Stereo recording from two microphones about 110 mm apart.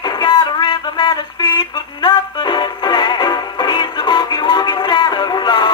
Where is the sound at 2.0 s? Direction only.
40° left (ahead or behind).